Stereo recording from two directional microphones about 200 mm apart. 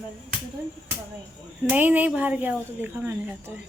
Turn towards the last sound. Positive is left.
turn(degrees=-10)  # may be behind; listen again after turning